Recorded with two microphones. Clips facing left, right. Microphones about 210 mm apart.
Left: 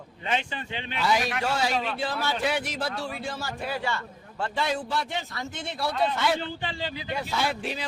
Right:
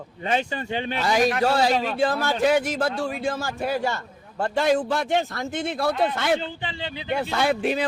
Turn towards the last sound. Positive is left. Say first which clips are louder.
# right 7 dB
turn(degrees=-55)  # may be behind; listen again after turning